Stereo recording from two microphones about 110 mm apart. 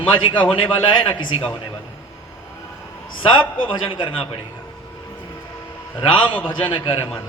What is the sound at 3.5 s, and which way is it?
Speech, 50° left (ahead or behind).